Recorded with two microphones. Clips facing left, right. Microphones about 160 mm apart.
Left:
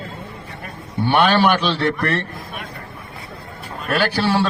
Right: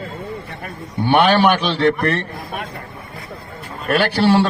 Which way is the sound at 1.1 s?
15° right (ahead or behind).